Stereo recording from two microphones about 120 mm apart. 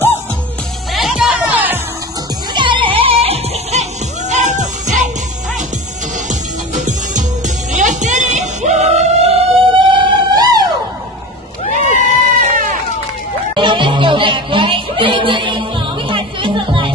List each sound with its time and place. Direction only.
0.9 s music: 5° right (ahead or behind)
2.5 s music: 45° right (ahead or behind)
4.3 s music: 80° right
6.8 s music: 90° right; by 10.6 s 35° right (ahead or behind)
11.9 s goat: 80° right
13.6 s music: 45° right (ahead or behind)